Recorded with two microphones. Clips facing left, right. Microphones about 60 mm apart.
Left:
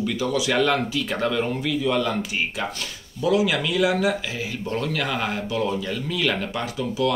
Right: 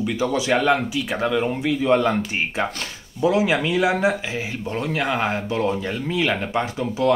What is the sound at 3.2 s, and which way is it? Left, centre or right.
Speech, right.